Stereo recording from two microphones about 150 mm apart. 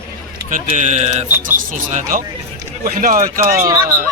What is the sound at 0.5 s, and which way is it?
Speech, 50° right (ahead or behind).